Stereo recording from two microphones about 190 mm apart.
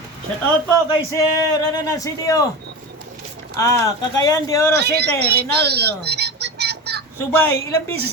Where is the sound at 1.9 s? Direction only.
15° left (ahead or behind).